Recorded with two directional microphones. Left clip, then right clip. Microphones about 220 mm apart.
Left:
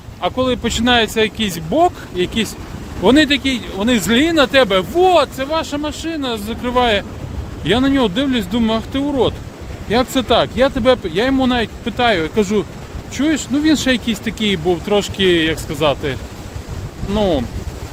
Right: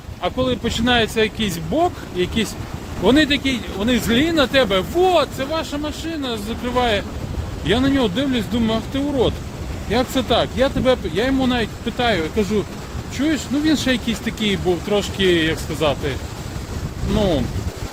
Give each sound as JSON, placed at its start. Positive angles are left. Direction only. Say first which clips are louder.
{"t": 0.2, "sound": "speech", "louder": "left 3 dB", "side_deg": 30}
{"t": 17.2, "sound": "speech", "louder": "left 3 dB", "side_deg": 30}